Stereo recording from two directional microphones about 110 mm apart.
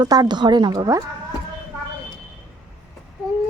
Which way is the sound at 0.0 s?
40° right (ahead or behind).